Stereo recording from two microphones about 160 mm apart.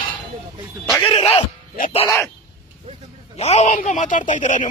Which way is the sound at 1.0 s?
35° left (ahead or behind).